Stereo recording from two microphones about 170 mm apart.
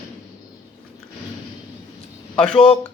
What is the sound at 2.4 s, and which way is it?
Speech, 5° left (ahead or behind).